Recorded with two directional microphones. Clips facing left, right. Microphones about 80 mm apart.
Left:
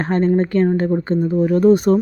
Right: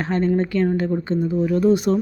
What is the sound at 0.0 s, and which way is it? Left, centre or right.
A woman's voice, left.